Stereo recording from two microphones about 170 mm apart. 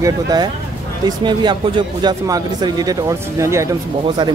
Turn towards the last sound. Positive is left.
turn(degrees=-20)  # may be behind; listen again after turning